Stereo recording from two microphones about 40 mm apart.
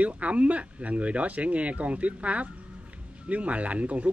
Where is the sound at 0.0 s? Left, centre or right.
Right.